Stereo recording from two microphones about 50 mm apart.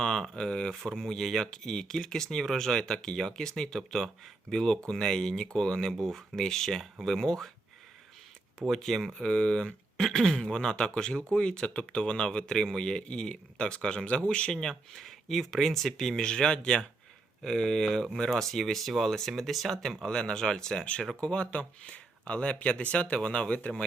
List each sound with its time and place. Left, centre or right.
0.0 s speech: centre
8.5 s speech: centre
9.1 s a man's voice: centre
20.1 s a man's voice: centre